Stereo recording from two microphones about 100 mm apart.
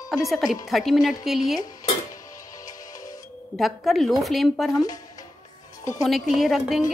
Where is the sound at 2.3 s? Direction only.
35° left (ahead or behind).